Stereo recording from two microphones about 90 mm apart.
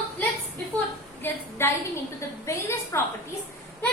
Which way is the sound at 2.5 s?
35° left (ahead or behind).